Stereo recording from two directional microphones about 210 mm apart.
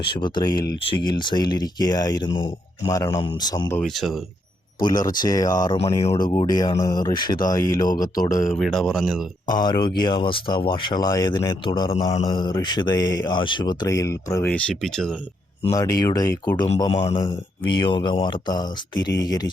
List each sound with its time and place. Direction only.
0.1 s speech: 20° left (ahead or behind)
3.8 s speech: centre (ahead or behind)
4.8 s speech: 20° left (ahead or behind)
8.5 s speech: centre (ahead or behind)
9.5 s speech: 20° left (ahead or behind); by 15.1 s centre (ahead or behind)
15.7 s speech: 20° left (ahead or behind)